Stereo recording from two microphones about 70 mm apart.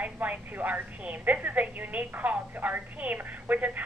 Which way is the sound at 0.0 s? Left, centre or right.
Right.